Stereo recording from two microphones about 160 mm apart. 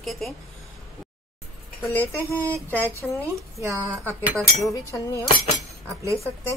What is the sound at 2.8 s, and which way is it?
Speech, 15° right (ahead or behind).